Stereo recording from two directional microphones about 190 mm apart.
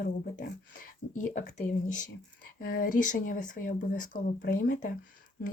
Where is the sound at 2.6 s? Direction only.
50° left (ahead or behind).